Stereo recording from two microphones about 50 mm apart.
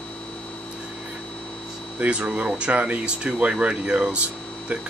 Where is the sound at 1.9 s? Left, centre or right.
Right.